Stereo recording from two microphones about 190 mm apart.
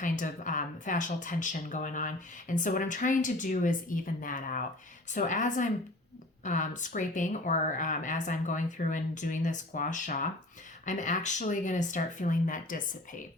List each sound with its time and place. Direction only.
0.0 s speech: 45° left (ahead or behind)